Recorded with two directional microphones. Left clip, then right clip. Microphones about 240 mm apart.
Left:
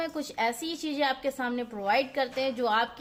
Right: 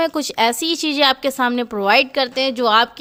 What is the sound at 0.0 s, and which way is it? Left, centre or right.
A woman's voice, right.